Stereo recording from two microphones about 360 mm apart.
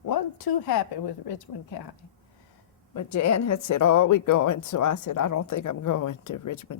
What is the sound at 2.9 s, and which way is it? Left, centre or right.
A woman's voice, left.